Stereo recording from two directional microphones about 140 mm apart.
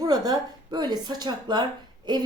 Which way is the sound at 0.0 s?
25° right (ahead or behind).